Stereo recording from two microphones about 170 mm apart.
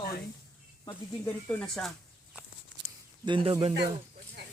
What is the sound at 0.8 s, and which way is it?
Speech, 10° left (ahead or behind).